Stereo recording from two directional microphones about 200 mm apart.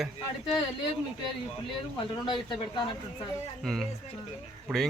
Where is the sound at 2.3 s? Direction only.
25° left (ahead or behind).